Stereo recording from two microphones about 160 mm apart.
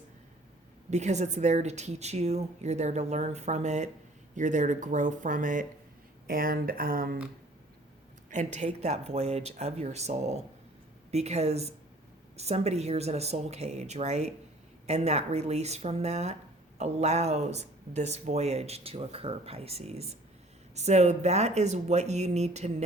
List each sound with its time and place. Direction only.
0.9 s speech: 45° right (ahead or behind)
6.2 s speech: 65° right (ahead or behind)
8.3 s speech: 45° right (ahead or behind)